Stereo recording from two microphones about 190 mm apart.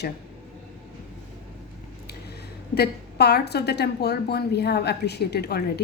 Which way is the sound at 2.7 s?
55° left (ahead or behind).